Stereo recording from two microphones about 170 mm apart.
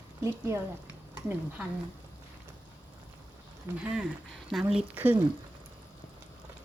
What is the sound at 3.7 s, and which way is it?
Speech, 15° right (ahead or behind).